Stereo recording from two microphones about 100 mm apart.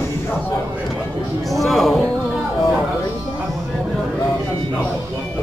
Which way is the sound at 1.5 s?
Centre (ahead or behind).